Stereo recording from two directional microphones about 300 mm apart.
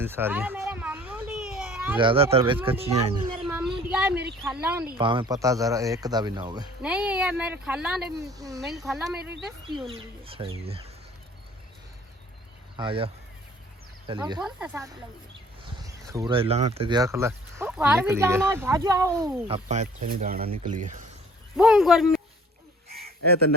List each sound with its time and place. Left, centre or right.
0.0 s a sound: centre
2.0 s speech: centre
3.4 s a sound: centre
4.6 s speech: centre
4.9 s speech: centre
6.8 s speech: centre
8.6 s speech: centre
9.1 s speech: right
9.6 s speech: centre
12.7 s speech: centre
14.1 s speech: centre
21.5 s speech: centre